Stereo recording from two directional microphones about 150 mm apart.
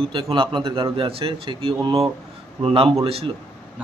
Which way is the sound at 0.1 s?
35° right (ahead or behind).